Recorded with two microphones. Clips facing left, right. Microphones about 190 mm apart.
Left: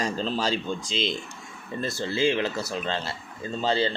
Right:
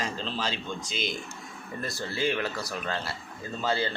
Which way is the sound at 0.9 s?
25° left (ahead or behind).